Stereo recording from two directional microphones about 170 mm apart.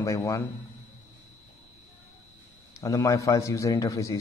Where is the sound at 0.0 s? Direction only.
20° left (ahead or behind).